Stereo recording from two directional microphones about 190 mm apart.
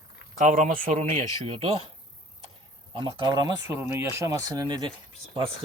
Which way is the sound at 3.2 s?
20° right (ahead or behind).